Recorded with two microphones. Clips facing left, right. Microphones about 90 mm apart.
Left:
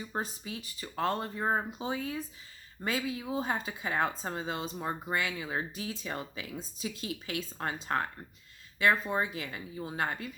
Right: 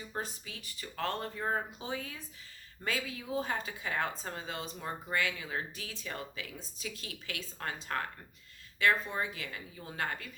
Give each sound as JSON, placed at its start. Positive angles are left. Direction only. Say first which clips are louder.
{"t": 0.1, "sound": "a woman's voice", "louder": "left 3 dB", "side_deg": 25}